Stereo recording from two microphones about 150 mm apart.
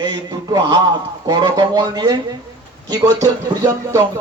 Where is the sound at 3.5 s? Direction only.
25° right (ahead or behind).